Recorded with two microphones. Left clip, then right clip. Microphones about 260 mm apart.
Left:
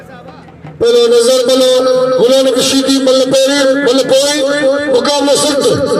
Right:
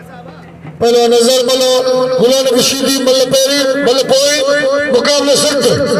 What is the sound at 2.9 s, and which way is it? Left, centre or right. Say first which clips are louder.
A man's voice: left 1 dB; right.